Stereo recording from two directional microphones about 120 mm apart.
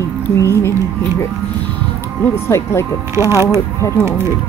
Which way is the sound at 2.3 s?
20° left (ahead or behind).